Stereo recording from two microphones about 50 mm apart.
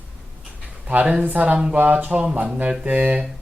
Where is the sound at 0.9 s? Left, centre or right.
Right.